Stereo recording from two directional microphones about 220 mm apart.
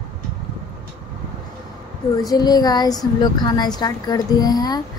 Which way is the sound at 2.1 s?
15° left (ahead or behind).